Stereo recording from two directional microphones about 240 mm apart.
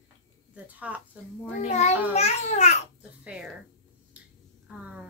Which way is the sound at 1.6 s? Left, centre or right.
Left.